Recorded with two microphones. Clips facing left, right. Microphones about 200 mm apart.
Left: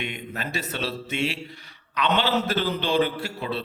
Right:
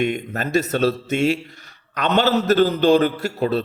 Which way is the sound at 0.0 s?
45° right (ahead or behind).